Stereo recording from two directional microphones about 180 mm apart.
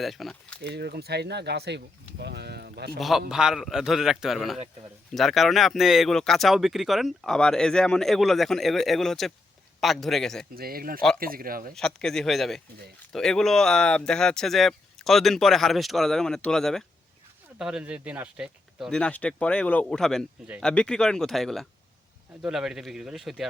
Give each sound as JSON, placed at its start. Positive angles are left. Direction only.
{"t": 0.0, "sound": "speech", "side_deg": 0}
{"t": 0.6, "sound": "speech", "side_deg": -65}
{"t": 3.0, "sound": "speech", "side_deg": 0}
{"t": 10.5, "sound": "a man's voice", "side_deg": -55}
{"t": 11.7, "sound": "speech", "side_deg": 5}